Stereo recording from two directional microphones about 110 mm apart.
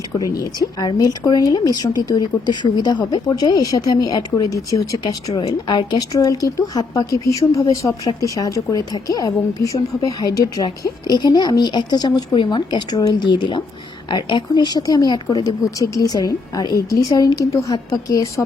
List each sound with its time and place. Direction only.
0.2 s a woman's voice: 35° left (ahead or behind)